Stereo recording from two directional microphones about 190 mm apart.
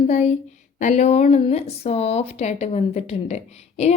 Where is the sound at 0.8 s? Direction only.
35° left (ahead or behind).